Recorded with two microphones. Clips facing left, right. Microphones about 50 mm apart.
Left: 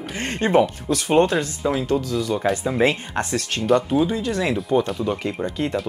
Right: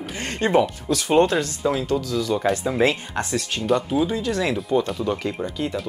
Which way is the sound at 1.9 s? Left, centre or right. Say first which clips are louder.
Left 1 dB; left.